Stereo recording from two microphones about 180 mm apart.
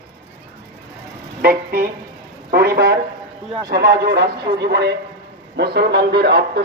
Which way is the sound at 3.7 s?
60° right (ahead or behind).